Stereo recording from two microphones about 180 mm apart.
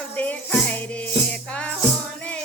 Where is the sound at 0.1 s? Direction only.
10° left (ahead or behind).